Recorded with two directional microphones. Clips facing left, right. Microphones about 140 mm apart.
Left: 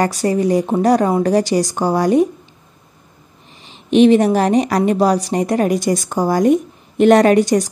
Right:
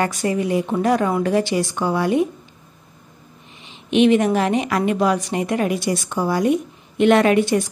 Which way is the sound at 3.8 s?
35° left (ahead or behind).